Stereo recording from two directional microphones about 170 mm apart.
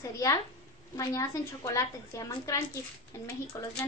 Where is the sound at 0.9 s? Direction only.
20° left (ahead or behind).